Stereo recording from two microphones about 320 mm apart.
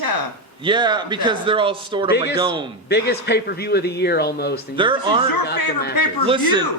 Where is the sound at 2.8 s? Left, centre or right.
Left.